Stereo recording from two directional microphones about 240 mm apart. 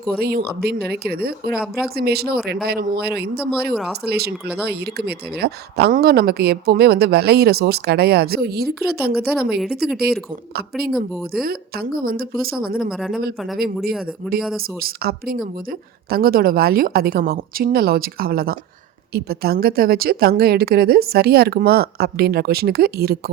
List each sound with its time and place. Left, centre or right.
0.2 s speech: right
3.7 s speech: centre
4.0 s speech: right
13.0 s speech: centre
14.8 s speech: right